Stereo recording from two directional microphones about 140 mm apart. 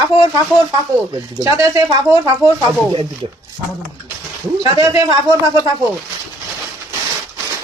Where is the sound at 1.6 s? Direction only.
25° right (ahead or behind).